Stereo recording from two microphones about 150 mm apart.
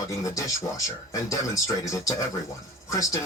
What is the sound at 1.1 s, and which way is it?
Speech, 20° left (ahead or behind).